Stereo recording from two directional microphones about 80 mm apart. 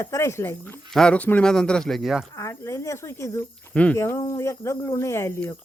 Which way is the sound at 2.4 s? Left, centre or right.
Left.